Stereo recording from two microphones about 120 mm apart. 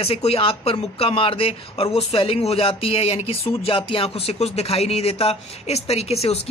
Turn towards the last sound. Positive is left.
turn(degrees=60)  # may be behind; listen again after turning